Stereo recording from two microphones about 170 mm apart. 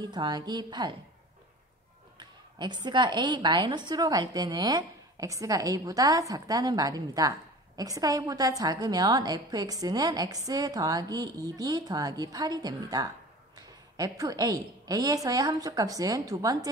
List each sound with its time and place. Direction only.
0.0 s a woman's voice: 25° right (ahead or behind)
2.1 s a woman's voice: 25° right (ahead or behind)